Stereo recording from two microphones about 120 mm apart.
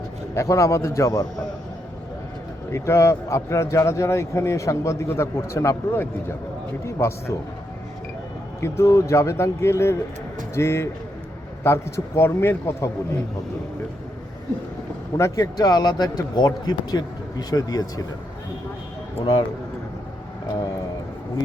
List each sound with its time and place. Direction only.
0.3 s speech: 25° left (ahead or behind)
2.7 s speech: 25° left (ahead or behind)
8.6 s speech: 20° left (ahead or behind)
15.2 s speech: 30° left (ahead or behind)
19.2 s speech: 40° left (ahead or behind)